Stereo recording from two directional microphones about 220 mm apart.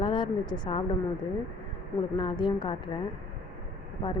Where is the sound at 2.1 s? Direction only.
20° left (ahead or behind).